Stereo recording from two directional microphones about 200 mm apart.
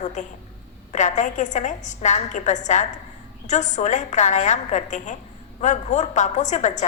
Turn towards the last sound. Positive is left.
turn(degrees=35)  # may be behind; listen again after turning